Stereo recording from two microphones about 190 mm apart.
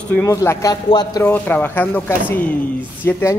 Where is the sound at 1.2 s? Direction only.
10° left (ahead or behind).